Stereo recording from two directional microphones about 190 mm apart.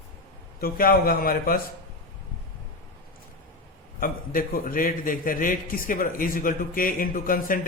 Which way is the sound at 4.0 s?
50° left (ahead or behind).